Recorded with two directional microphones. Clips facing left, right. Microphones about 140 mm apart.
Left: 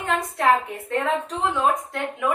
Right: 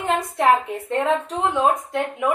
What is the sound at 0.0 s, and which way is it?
A woman's voice, 20° right (ahead or behind).